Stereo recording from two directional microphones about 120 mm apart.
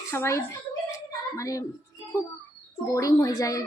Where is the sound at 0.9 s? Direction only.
25° left (ahead or behind).